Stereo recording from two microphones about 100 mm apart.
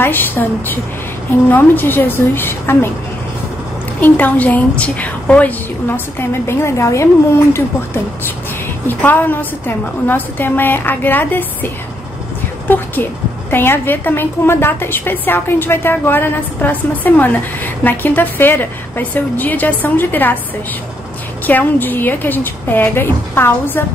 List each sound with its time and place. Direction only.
0.0 s a woman's voice: 20° left (ahead or behind)
4.0 s a woman's voice: 15° left (ahead or behind)
21.5 s a woman's voice: 20° left (ahead or behind)